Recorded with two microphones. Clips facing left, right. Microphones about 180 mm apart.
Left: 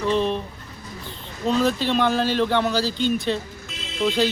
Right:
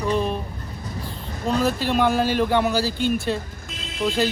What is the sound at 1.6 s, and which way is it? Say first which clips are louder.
Speech: even; 10° right (ahead or behind).